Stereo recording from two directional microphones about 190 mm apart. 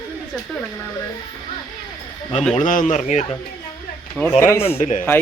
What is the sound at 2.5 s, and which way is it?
Speech, 45° left (ahead or behind).